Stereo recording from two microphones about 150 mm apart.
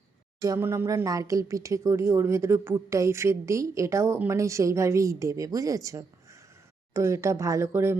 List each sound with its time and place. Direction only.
0.3 s speech: 20° right (ahead or behind)